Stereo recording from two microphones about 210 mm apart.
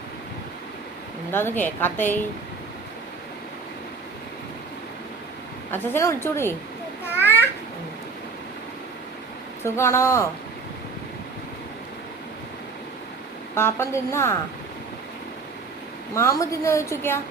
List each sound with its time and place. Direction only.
1.3 s a woman's voice: 10° left (ahead or behind)
5.7 s a woman's voice: 10° left (ahead or behind)
7.2 s babbling: 10° left (ahead or behind)
9.6 s a woman's voice: 15° left (ahead or behind)
13.6 s a woman's voice: 10° left (ahead or behind)
16.1 s a woman's voice: 15° left (ahead or behind)